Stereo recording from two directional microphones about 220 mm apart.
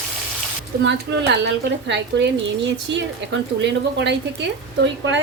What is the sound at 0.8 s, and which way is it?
A woman's voice, 50° right (ahead or behind).